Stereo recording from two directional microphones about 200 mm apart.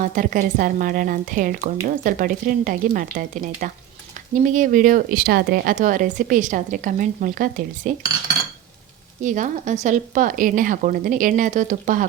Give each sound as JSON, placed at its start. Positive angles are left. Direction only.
{"t": 0.0, "sound": "a woman's voice", "side_deg": -40}
{"t": 9.2, "sound": "speech", "side_deg": -40}